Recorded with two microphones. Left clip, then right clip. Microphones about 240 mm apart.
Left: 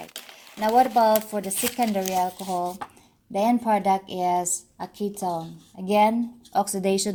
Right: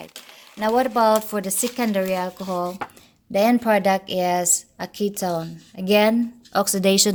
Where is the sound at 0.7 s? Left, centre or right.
Right.